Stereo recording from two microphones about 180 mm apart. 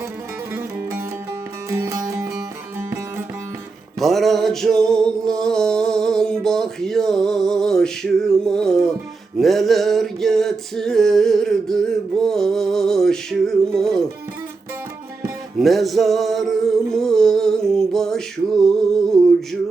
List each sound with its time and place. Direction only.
0.5 s music: 15° right (ahead or behind)
4.0 s music: centre (ahead or behind)
6.4 s male singing: 5° left (ahead or behind)
9.4 s music: centre (ahead or behind)
15.5 s music: centre (ahead or behind)
19.1 s male singing: centre (ahead or behind)